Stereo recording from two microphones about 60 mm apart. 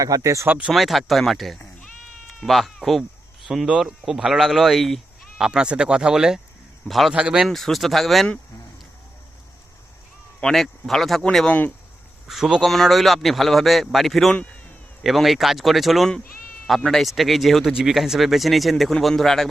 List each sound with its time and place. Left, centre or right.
0.0 s speech: right
0.7 s speech: centre
5.4 s speech: centre
6.8 s speech: centre
7.1 s speech: centre
7.4 s speech: centre
10.4 s speech: centre
12.3 s speech: centre
12.6 s speech: centre